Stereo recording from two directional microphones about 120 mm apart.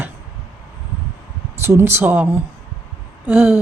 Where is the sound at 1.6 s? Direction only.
20° right (ahead or behind).